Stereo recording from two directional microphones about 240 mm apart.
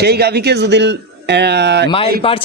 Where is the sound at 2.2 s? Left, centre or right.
Left.